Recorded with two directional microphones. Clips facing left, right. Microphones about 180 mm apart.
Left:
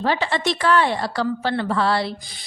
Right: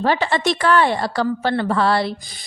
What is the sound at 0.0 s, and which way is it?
A woman's voice, 50° right (ahead or behind).